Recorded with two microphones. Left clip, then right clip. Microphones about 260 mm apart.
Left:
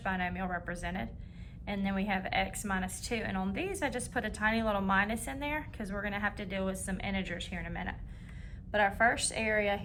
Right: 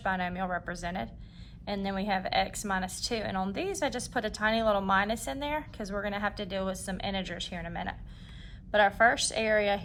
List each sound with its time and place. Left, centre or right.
0.0 s a woman's voice: centre